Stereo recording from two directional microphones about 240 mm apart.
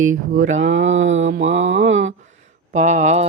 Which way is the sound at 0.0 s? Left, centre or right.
Right.